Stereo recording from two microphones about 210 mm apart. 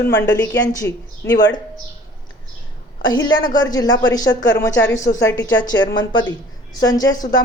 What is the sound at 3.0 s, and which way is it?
A woman's voice, 20° left (ahead or behind).